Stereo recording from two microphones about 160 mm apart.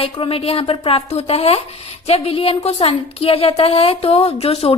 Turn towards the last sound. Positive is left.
turn(degrees=40)  # may be behind; listen again after turning